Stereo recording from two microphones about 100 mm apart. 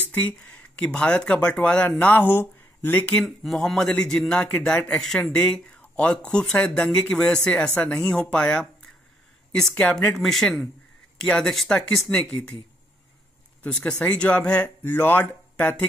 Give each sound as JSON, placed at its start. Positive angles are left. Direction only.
{"t": 0.0, "sound": "a man's voice", "side_deg": 20}
{"t": 3.3, "sound": "a man's voice", "side_deg": 5}
{"t": 13.6, "sound": "a man's voice", "side_deg": 10}